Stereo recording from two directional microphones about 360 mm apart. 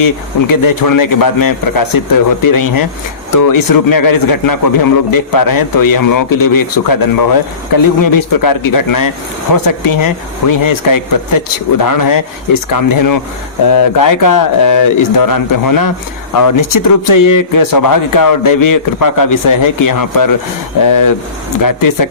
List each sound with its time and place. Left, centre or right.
0.0 s a man's voice: left